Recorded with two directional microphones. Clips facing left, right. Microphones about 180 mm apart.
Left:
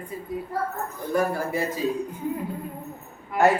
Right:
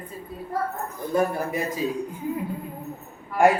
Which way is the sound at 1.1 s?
20° right (ahead or behind).